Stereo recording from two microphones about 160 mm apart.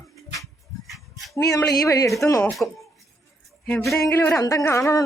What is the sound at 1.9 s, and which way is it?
Speech, 20° left (ahead or behind).